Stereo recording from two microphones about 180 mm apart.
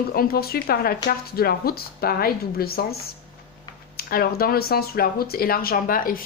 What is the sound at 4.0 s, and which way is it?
A woman's voice, 55° left (ahead or behind).